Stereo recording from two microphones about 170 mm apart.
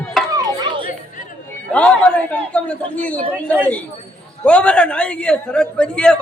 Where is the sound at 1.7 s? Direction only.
5° left (ahead or behind).